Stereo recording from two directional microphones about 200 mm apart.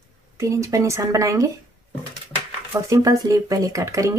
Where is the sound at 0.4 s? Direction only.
15° right (ahead or behind).